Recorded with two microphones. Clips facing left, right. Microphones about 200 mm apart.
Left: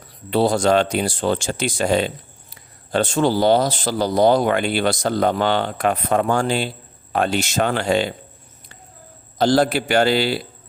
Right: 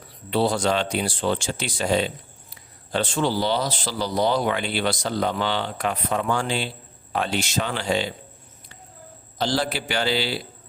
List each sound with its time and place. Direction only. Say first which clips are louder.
0.3 s speech: left 5 dB; 45° left (ahead or behind)
9.4 s speech: left 8 dB; 50° left (ahead or behind)